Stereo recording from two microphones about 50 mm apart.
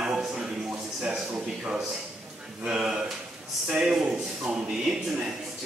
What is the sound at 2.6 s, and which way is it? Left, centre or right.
A man's voice, centre.